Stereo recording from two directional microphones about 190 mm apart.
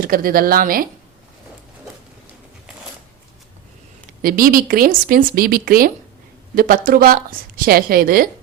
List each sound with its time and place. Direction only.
0.0 s speech: 50° right (ahead or behind)
4.2 s speech: 50° right (ahead or behind)